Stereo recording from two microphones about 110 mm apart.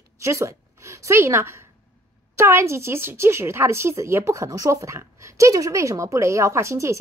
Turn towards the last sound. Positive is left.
turn(degrees=-25)  # may be behind; listen again after turning